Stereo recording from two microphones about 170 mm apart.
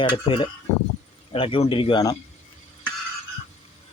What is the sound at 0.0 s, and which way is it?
Speech, 30° left (ahead or behind).